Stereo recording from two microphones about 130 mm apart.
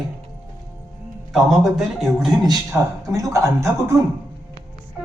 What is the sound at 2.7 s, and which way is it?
Speech, 25° right (ahead or behind).